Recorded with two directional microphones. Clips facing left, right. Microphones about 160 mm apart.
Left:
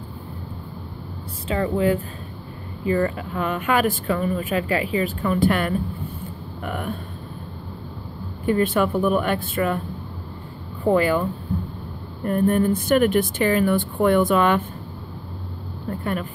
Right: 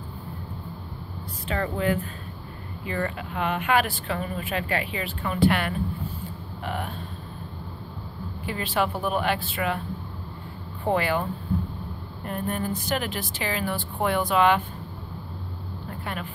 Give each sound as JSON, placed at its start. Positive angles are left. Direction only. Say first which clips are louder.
{"t": 1.5, "sound": "speech", "louder": "left 5 dB", "side_deg": 30}
{"t": 8.5, "sound": "speech", "louder": "left 7 dB", "side_deg": 45}
{"t": 10.8, "sound": "speech", "louder": "left 6 dB", "side_deg": 40}
{"t": 12.3, "sound": "speech", "louder": "left 10 dB", "side_deg": 50}
{"t": 15.9, "sound": "speech", "louder": "left 8 dB", "side_deg": 40}